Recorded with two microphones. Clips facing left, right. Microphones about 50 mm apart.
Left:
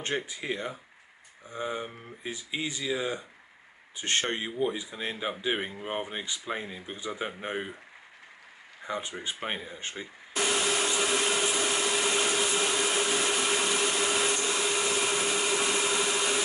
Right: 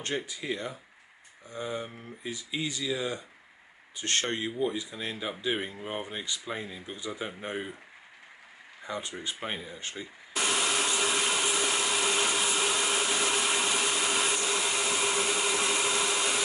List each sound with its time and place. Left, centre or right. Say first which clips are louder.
0.0 s speech: left 1 dB; left
8.8 s speech: left 2 dB; centre
10.3 s a sound: left 1 dB; centre